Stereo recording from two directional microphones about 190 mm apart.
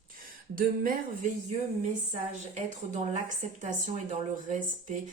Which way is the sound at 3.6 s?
40° right (ahead or behind).